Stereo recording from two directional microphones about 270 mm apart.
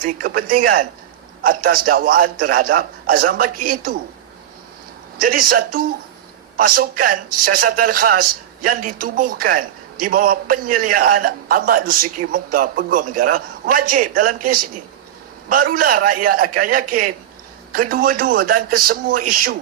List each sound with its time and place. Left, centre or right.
0.0 s a man's voice: right
5.2 s a man's voice: right